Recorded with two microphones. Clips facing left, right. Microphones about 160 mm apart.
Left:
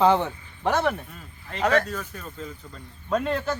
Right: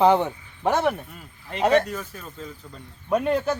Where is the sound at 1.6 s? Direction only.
20° right (ahead or behind); by 2.8 s 5° right (ahead or behind).